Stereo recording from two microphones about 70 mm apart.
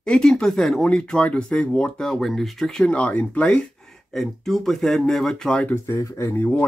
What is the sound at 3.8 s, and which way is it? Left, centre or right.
Speech, centre.